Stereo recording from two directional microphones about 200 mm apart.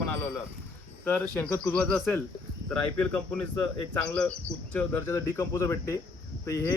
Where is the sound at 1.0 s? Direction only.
10° left (ahead or behind).